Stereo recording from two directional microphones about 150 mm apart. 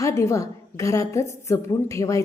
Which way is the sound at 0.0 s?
20° left (ahead or behind).